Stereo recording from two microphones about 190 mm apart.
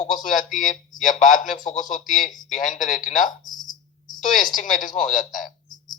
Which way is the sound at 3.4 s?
20° left (ahead or behind).